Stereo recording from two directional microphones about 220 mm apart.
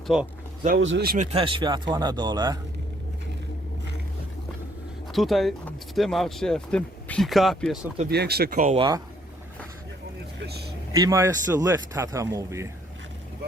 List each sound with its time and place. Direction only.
0.1 s speech: centre (ahead or behind)
0.8 s speech: 55° right (ahead or behind)
1.3 s speech: 25° right (ahead or behind)
5.1 s speech: centre (ahead or behind)
8.1 s speech: 45° right (ahead or behind)
10.9 s a man's voice: 15° right (ahead or behind)